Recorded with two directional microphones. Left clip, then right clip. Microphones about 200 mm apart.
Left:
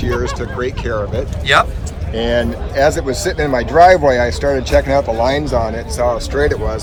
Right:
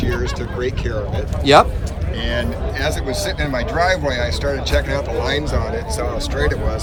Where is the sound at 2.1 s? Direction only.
15° left (ahead or behind).